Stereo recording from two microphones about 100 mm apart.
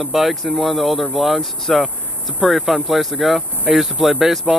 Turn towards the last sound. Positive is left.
turn(degrees=-5)  # may be behind; listen again after turning